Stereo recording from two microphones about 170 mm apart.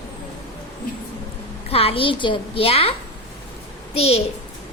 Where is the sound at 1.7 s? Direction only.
35° left (ahead or behind).